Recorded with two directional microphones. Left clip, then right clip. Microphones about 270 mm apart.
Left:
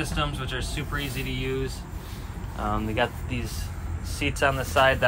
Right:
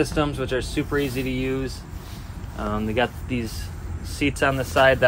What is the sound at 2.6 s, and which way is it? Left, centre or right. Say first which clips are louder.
Speech: right 2 dB; centre.